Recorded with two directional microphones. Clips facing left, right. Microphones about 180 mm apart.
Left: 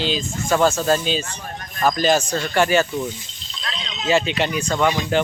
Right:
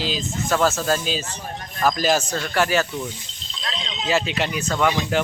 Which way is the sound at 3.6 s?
30° right (ahead or behind).